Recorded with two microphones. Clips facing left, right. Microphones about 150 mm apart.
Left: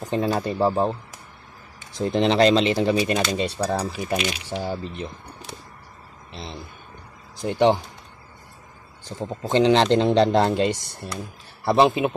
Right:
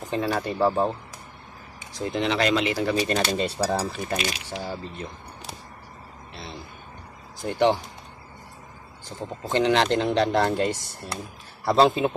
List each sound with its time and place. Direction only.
0.0 s speech: 20° left (ahead or behind)
2.0 s speech: 30° left (ahead or behind)
3.0 s speech: 10° left (ahead or behind)
3.3 s cutlery: 5° right (ahead or behind)
4.1 s speech: 15° left (ahead or behind)
7.4 s speech: 20° left (ahead or behind)
9.2 s speech: 25° left (ahead or behind)